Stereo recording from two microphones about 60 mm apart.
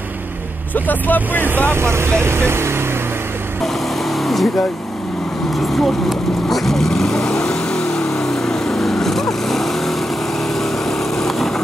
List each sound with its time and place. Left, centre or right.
0.7 s speech: left
1.7 s speech: right
3.6 s vehicle: centre
5.7 s vehicle: centre